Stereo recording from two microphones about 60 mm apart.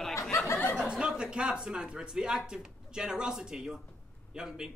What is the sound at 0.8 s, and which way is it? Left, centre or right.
Speech, centre.